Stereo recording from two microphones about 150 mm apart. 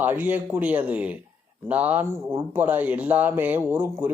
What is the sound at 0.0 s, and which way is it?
Speech, 10° right (ahead or behind).